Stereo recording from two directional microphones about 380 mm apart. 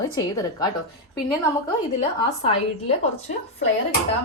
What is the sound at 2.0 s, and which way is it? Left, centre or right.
Speech, centre.